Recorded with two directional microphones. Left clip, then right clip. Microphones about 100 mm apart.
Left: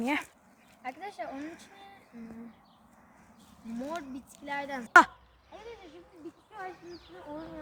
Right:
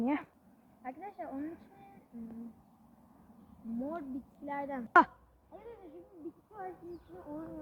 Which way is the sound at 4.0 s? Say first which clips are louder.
Even; 20° left (ahead or behind).